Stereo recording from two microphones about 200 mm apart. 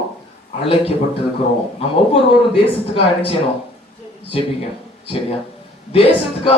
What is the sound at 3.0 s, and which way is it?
Speech, 30° left (ahead or behind).